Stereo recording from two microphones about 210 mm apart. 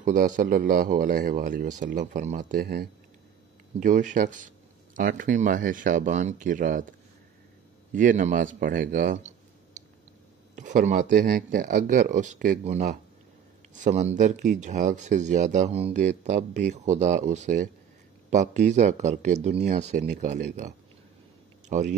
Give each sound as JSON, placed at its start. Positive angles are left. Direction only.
{"t": 0.0, "sound": "speech", "side_deg": -40}
{"t": 9.8, "sound": "a sound", "side_deg": -35}
{"t": 10.5, "sound": "speech", "side_deg": -35}